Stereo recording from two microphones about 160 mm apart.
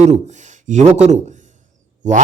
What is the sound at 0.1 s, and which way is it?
Speech, 45° right (ahead or behind).